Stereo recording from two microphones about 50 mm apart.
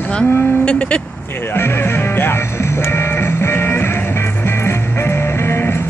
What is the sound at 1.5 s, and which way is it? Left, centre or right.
Music, left.